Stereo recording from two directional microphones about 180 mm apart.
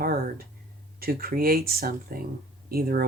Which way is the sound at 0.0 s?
55° right (ahead or behind).